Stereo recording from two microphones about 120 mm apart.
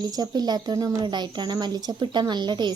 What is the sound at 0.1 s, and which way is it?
Speech, 35° right (ahead or behind).